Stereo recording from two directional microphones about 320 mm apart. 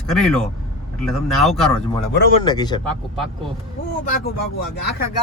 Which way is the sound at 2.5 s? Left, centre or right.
Centre.